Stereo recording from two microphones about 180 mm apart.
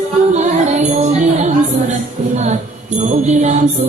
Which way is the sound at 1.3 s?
40° right (ahead or behind).